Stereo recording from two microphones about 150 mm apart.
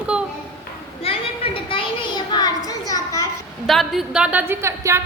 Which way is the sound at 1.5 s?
35° left (ahead or behind).